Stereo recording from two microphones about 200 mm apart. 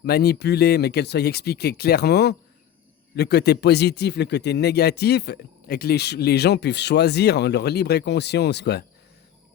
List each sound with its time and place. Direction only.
0.0 s speech: 55° left (ahead or behind)